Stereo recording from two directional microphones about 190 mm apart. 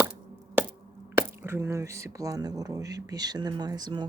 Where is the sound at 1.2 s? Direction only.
15° right (ahead or behind).